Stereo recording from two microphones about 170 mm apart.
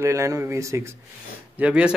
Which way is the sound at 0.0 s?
20° right (ahead or behind).